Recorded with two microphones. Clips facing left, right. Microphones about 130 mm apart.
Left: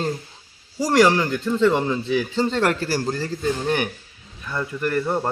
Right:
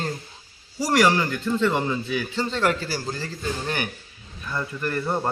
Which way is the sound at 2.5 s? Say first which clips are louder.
Even; 50° left (ahead or behind).